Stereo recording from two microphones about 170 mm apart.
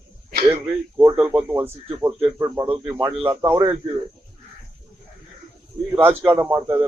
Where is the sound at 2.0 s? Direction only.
20° right (ahead or behind).